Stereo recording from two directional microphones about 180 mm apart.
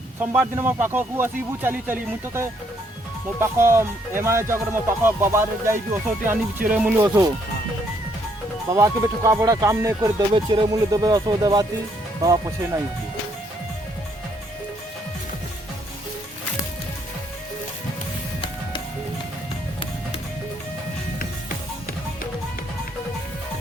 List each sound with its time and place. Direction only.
0.2 s speech: 10° right (ahead or behind)
8.7 s speech: 15° right (ahead or behind)